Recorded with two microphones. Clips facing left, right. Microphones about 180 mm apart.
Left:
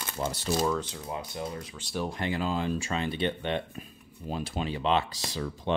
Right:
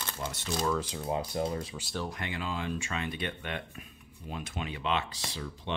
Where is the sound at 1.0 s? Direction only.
30° right (ahead or behind).